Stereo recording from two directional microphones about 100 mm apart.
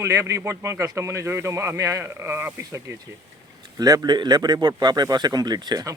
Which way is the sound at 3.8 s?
40° right (ahead or behind).